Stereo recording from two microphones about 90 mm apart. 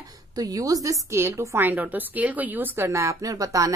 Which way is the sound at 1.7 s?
20° right (ahead or behind).